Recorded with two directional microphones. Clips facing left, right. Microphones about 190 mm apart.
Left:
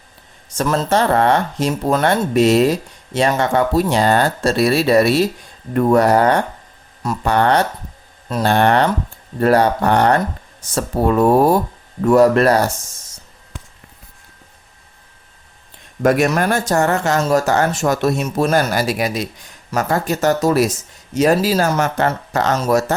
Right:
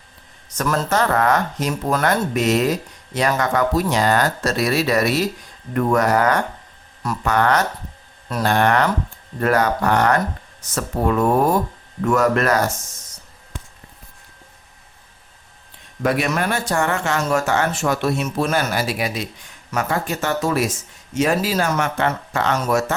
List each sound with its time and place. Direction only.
0.5 s speech: 25° left (ahead or behind)
16.0 s speech: 45° left (ahead or behind)